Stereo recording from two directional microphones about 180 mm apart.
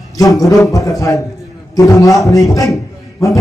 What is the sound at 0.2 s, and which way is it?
A man's voice, 20° left (ahead or behind).